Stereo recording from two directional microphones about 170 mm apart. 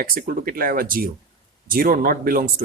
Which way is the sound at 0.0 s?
60° right (ahead or behind).